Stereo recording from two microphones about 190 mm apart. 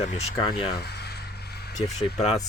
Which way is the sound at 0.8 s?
60° left (ahead or behind).